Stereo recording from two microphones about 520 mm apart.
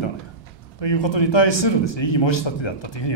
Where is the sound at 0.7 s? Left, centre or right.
Left.